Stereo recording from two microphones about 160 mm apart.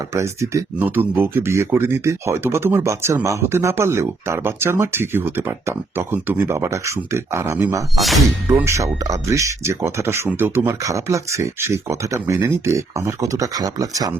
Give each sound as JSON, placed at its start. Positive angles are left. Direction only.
{"t": 0.1, "sound": "speech", "side_deg": -20}
{"t": 7.9, "sound": "speech", "side_deg": 0}
{"t": 8.5, "sound": "speech", "side_deg": -20}